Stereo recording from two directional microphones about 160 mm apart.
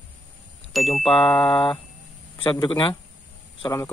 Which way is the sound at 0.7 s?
Centre (ahead or behind).